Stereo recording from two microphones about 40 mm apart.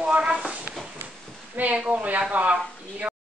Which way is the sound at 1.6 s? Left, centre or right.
Right.